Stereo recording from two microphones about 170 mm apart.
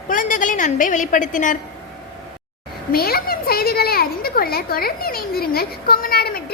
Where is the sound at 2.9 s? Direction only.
60° left (ahead or behind).